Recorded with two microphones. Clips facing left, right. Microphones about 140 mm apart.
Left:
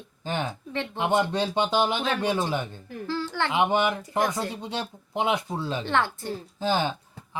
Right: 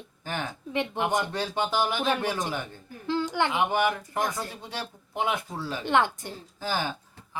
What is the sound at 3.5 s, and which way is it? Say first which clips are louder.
Speech: left 2 dB; 20° left (ahead or behind).